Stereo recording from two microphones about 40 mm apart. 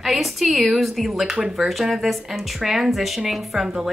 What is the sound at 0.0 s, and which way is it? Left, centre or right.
A woman's voice, centre.